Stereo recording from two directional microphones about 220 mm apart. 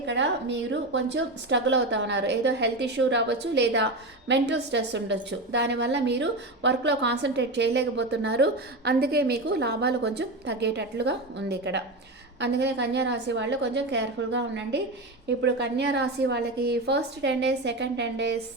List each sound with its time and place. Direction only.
0.0 s a woman's voice: 55° right (ahead or behind)